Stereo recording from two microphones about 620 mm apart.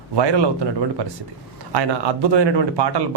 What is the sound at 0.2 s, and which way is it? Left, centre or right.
A man's voice, right.